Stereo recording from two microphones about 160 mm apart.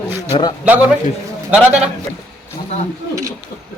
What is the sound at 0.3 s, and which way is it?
Speech, 35° left (ahead or behind).